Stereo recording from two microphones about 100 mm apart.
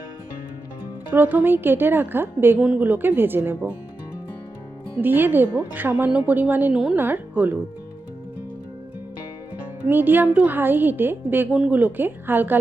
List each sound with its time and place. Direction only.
1.1 s a woman's voice: 15° right (ahead or behind)
4.9 s a woman's voice: 20° right (ahead or behind)
9.9 s a woman's voice: 20° right (ahead or behind)